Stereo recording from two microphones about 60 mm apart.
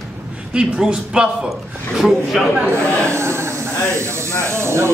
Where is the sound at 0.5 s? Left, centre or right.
Centre.